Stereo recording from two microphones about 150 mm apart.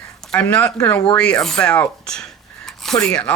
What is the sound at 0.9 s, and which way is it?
Speech, 10° left (ahead or behind).